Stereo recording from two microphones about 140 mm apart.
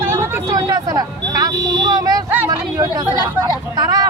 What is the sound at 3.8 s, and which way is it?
Speech, 25° right (ahead or behind).